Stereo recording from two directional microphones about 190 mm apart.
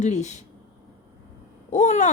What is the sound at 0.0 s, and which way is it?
Speech, 35° left (ahead or behind).